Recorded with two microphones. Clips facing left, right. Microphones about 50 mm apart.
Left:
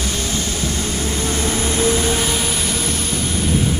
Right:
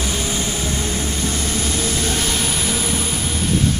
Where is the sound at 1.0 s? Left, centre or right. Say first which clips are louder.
Left 2 dB; left.